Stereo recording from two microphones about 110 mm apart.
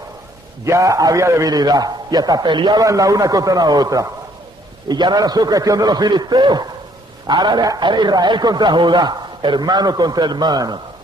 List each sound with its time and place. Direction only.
0.7 s a man's voice: 30° right (ahead or behind)
2.8 s a man's voice: 30° right (ahead or behind)